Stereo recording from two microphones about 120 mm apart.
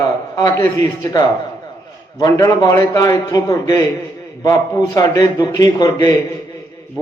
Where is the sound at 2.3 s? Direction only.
25° left (ahead or behind).